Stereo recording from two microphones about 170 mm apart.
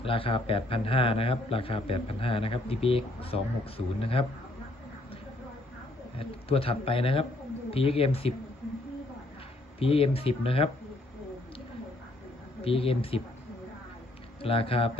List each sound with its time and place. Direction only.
0.0 s speech: 30° left (ahead or behind)
6.1 s speech: 35° left (ahead or behind)
9.8 s speech: 35° left (ahead or behind)
12.6 s speech: 35° left (ahead or behind)
14.4 s speech: 35° left (ahead or behind)